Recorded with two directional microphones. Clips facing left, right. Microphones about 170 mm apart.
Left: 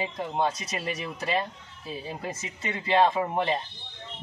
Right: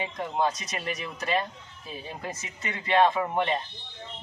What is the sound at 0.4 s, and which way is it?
Speech, 30° left (ahead or behind).